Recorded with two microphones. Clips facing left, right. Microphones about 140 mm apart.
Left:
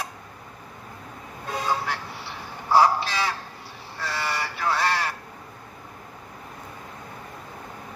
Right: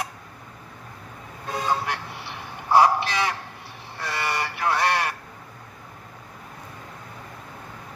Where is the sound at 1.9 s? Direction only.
15° right (ahead or behind).